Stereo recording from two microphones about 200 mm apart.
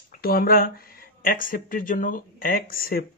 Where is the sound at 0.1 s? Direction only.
45° left (ahead or behind).